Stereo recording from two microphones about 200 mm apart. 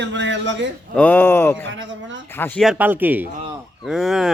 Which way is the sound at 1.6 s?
70° right (ahead or behind).